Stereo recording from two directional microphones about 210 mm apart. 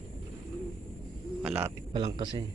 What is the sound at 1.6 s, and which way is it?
Speech, 15° right (ahead or behind).